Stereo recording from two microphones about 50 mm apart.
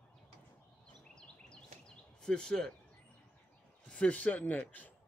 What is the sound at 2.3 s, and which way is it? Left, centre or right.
Speech, centre.